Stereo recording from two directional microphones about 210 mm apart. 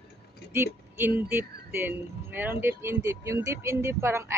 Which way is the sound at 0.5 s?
10° right (ahead or behind).